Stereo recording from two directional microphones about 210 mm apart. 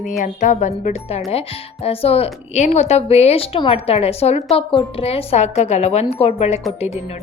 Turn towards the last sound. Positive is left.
turn(degrees=30)  # may be behind; listen again after turning